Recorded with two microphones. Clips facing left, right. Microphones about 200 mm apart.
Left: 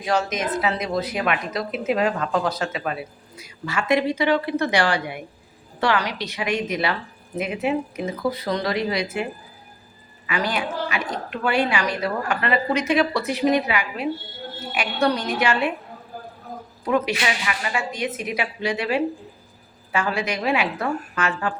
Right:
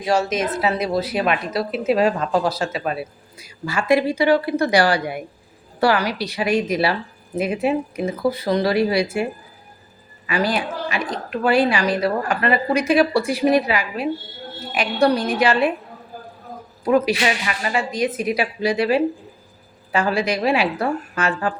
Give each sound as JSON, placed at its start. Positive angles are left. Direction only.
{"t": 0.0, "sound": "a woman's voice", "side_deg": -30}
{"t": 10.2, "sound": "a woman's voice", "side_deg": -35}
{"t": 16.9, "sound": "a man's voice", "side_deg": -35}